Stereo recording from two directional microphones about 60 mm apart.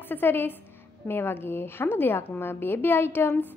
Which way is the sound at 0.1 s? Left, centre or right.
Left.